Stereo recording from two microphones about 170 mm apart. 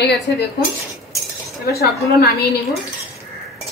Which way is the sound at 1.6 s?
65° left (ahead or behind).